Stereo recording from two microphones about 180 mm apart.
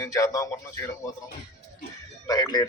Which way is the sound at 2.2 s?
20° left (ahead or behind).